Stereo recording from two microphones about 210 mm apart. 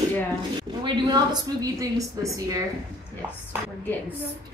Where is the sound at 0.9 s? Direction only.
20° right (ahead or behind).